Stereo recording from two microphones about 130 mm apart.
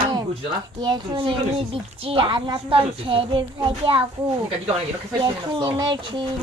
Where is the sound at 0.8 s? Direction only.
35° right (ahead or behind).